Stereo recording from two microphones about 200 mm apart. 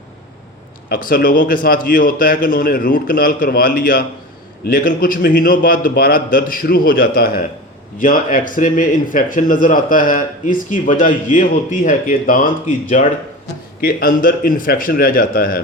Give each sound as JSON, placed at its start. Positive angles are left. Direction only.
{"t": 0.9, "sound": "a man's voice", "side_deg": 45}